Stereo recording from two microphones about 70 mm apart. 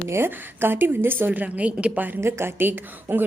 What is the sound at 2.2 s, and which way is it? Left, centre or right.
A woman's voice, right.